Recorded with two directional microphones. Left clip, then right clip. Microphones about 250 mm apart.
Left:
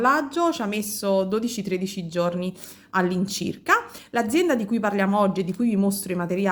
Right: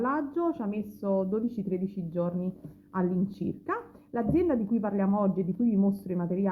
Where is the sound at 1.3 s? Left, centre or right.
Centre.